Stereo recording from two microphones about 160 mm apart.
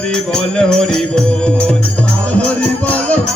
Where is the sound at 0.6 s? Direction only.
5° left (ahead or behind).